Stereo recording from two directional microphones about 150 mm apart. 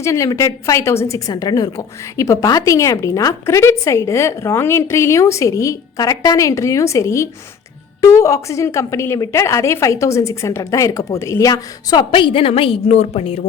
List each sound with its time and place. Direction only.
0.0 s a woman's voice: 20° left (ahead or behind); by 13.4 s 40° left (ahead or behind)